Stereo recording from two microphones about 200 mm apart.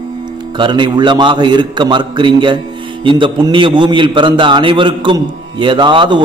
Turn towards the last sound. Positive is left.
turn(degrees=-25)  # may be behind; listen again after turning